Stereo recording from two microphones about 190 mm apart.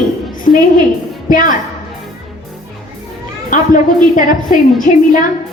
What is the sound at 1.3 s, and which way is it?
Speech, 45° left (ahead or behind).